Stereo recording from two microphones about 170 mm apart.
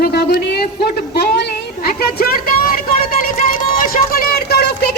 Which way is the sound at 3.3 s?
55° left (ahead or behind).